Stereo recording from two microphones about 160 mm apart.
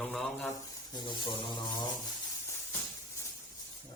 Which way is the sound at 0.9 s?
30° left (ahead or behind).